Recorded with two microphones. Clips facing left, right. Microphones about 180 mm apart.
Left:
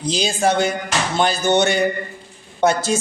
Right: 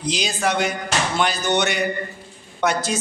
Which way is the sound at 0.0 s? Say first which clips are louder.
Left 4 dB; 30° left (ahead or behind).